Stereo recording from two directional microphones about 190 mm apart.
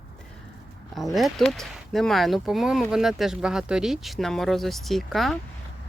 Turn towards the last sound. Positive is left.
turn(degrees=0)  # may be behind; listen again after turning